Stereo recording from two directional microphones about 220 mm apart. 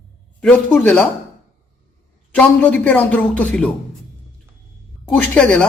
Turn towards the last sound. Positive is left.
turn(degrees=5)  # may be behind; listen again after turning